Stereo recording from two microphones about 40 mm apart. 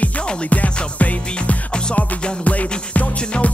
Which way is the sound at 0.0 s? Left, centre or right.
Left.